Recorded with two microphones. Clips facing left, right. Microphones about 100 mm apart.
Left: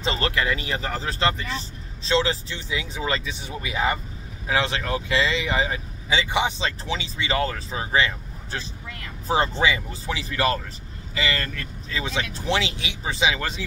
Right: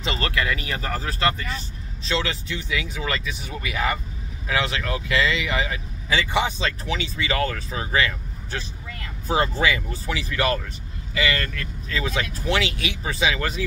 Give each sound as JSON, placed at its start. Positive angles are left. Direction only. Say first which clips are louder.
{"t": 0.0, "sound": "speech", "louder": "left 1 dB", "side_deg": 30}
{"t": 6.1, "sound": "speech", "louder": "even", "side_deg": 20}